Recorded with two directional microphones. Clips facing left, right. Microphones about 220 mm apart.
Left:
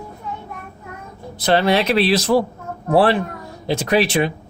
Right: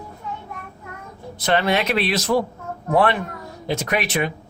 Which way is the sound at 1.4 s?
35° left (ahead or behind).